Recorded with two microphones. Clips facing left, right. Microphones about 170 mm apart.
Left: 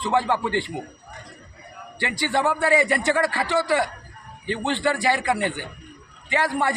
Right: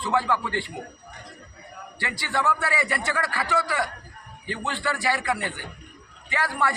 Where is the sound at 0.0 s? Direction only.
25° left (ahead or behind).